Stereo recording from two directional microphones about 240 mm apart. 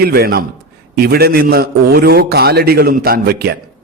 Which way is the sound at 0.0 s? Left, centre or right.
Right.